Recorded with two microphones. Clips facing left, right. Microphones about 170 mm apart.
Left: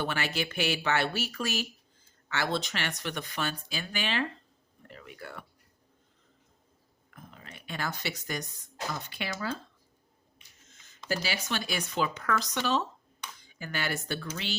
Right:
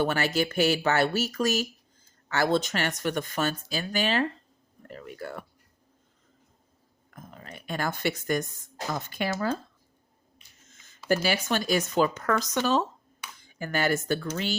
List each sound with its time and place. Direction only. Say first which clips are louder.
0.0 s speech: right 6 dB; 40° right (ahead or behind)
4.9 s a sound: right 7 dB; 40° right (ahead or behind)
7.1 s speech: right 5 dB; 45° right (ahead or behind)
11.1 s speech: right 7 dB; 50° right (ahead or behind)